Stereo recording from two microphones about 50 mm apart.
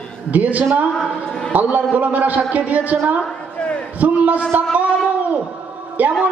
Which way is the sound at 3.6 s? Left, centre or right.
Left.